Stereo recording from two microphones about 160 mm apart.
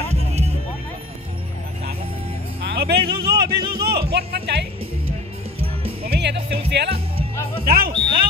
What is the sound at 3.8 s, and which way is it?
Speech, 80° right.